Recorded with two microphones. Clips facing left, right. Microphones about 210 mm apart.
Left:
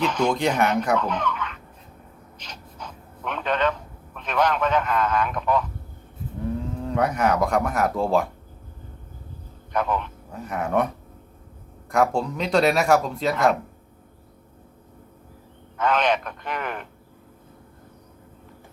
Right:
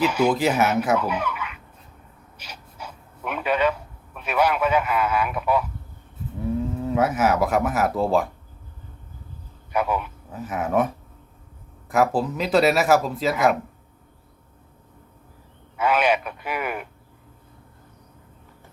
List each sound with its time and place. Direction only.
0.0 s speech: 10° right (ahead or behind)
2.4 s a sound: 10° right (ahead or behind)
6.7 s speech: 5° right (ahead or behind)
9.7 s a man's voice: 10° right (ahead or behind)
15.8 s speech: 10° right (ahead or behind)